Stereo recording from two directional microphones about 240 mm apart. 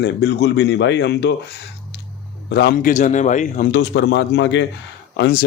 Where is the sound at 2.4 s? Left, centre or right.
Left.